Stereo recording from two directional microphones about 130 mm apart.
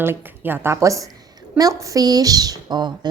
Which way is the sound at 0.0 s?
15° right (ahead or behind).